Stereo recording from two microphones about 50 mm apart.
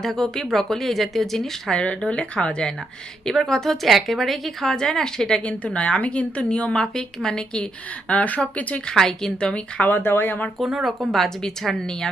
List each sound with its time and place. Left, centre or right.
0.0 s speech: centre
1.7 s a woman's voice: left
3.2 s a woman's voice: centre
5.4 s a woman's voice: left
6.8 s a woman's voice: centre; by 8.4 s left
8.9 s a woman's voice: centre
9.7 s speech: left
10.0 s speech: left
10.6 s speech: centre
11.1 s speech: centre